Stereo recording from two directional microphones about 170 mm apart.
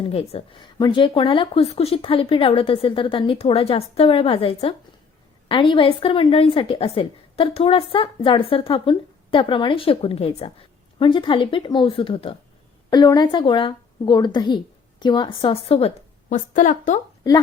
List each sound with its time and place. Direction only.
0.0 s a woman's voice: 35° left (ahead or behind)
16.3 s a woman's voice: 50° left (ahead or behind)